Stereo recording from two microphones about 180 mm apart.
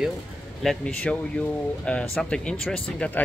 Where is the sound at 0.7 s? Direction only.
5° left (ahead or behind).